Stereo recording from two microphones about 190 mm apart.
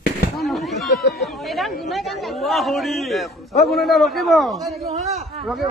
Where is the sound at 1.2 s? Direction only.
Centre (ahead or behind).